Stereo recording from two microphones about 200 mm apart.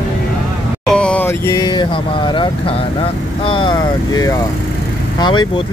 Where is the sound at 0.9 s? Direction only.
5° left (ahead or behind); by 5.6 s 25° left (ahead or behind).